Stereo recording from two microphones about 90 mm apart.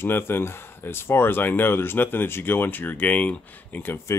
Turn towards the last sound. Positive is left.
turn(degrees=25)  # may be behind; listen again after turning